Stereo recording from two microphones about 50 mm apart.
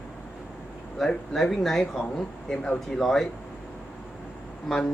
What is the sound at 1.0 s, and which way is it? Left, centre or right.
Speech, centre.